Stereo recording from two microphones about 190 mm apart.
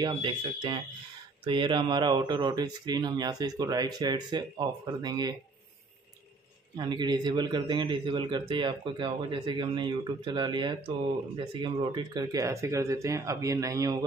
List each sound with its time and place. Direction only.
0.0 s speech: 25° right (ahead or behind)
6.8 s speech: 25° right (ahead or behind)